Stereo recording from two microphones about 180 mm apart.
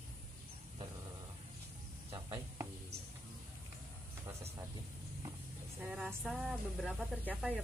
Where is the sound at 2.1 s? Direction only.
25° right (ahead or behind).